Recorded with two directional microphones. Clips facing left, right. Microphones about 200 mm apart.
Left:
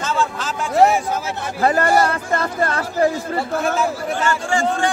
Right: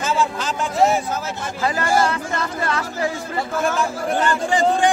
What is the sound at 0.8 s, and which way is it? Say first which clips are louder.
Speech: left 3 dB; 65° left (ahead or behind).